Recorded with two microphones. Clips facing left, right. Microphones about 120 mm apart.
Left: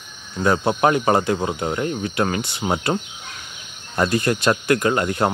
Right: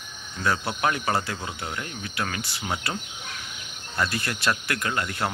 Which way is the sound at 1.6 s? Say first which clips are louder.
Left 11 dB; 35° left (ahead or behind).